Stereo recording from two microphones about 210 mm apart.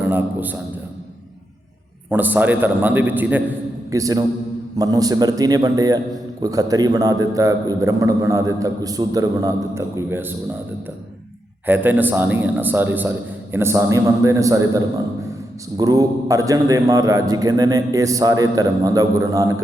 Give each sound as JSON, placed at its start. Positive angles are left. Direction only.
{"t": 0.0, "sound": "a man's voice", "side_deg": -10}
{"t": 2.0, "sound": "a man's voice", "side_deg": -10}
{"t": 11.6, "sound": "a man's voice", "side_deg": -10}